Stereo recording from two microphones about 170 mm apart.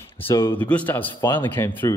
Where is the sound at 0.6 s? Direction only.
10° left (ahead or behind).